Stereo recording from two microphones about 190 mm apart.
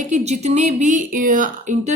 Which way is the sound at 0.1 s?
35° right (ahead or behind).